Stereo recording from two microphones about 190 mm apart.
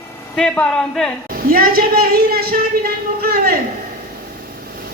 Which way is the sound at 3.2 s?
50° right (ahead or behind).